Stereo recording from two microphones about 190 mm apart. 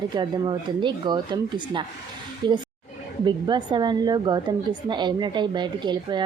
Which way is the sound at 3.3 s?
25° right (ahead or behind).